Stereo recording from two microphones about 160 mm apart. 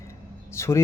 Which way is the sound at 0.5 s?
15° left (ahead or behind).